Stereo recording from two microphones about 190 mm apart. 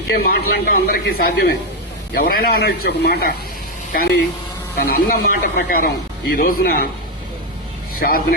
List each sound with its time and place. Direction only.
0.1 s speech: 50° left (ahead or behind)
7.9 s speech: 50° left (ahead or behind)